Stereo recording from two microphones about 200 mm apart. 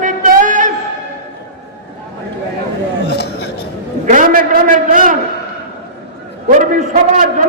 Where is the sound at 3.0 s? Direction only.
55° left (ahead or behind).